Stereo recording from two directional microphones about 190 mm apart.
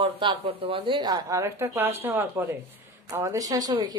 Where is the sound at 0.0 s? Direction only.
25° right (ahead or behind).